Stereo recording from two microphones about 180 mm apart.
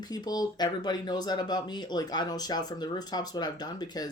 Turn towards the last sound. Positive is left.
turn(degrees=20)  # may be behind; listen again after turning